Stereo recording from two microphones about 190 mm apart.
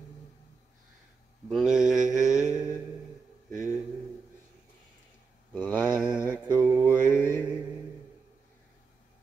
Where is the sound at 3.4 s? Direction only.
15° left (ahead or behind).